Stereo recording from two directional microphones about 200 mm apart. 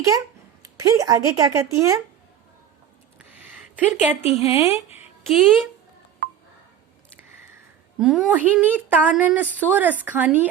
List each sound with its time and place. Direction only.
0.1 s a woman's voice: 15° right (ahead or behind)
3.2 s a sound: 10° right (ahead or behind)
4.2 s a woman's voice: 30° left (ahead or behind)
5.2 s speech: centre (ahead or behind)
7.9 s a woman's voice: centre (ahead or behind)